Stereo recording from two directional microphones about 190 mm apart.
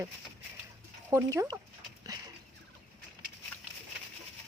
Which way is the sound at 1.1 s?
15° right (ahead or behind).